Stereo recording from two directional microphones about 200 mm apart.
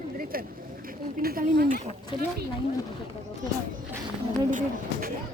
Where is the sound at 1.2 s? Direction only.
45° right (ahead or behind).